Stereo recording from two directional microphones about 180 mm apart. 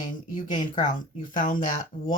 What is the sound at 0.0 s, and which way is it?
Speech, 45° left (ahead or behind).